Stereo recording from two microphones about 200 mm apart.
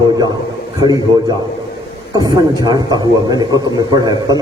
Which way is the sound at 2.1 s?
20° right (ahead or behind).